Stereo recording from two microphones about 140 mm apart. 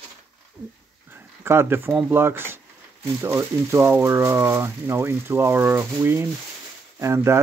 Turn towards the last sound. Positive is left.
turn(degrees=-20)  # may be behind; listen again after turning